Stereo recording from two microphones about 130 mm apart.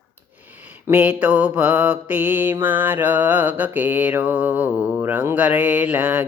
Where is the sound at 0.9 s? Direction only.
10° right (ahead or behind).